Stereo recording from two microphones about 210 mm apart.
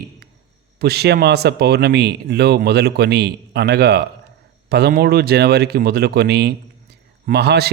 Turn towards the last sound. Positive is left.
turn(degrees=-50)  # may be behind; listen again after turning